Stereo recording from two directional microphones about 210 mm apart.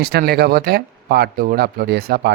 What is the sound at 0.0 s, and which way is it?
Speech, 50° right (ahead or behind).